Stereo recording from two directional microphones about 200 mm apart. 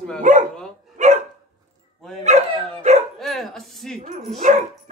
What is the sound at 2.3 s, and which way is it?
Speech, 35° right (ahead or behind).